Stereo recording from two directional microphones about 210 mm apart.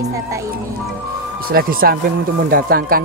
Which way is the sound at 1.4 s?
45° right (ahead or behind).